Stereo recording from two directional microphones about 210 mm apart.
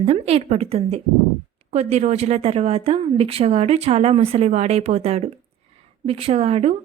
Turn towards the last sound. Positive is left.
turn(degrees=-30)  # may be behind; listen again after turning